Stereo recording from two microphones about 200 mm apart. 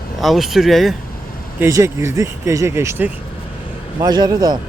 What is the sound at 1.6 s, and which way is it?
A man's voice, 15° right (ahead or behind).